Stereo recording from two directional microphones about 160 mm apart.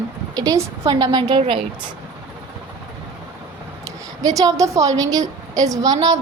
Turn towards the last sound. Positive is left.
turn(degrees=-25)  # may be behind; listen again after turning